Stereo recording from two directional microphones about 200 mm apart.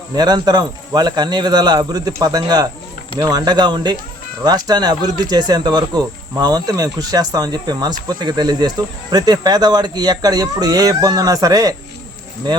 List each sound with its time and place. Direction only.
0.2 s speech: 20° right (ahead or behind)